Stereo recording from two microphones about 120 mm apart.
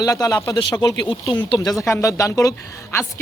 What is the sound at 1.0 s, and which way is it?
Speech, 45° left (ahead or behind).